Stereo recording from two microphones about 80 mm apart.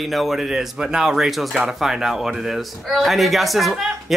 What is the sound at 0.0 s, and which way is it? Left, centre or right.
Speech, centre.